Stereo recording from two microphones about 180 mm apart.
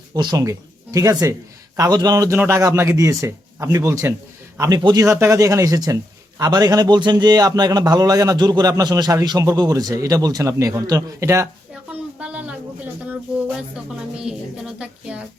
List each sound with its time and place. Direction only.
0.1 s a man's voice: 20° right (ahead or behind)
12.2 s a sound: 5° right (ahead or behind)
14.2 s speech: 5° right (ahead or behind)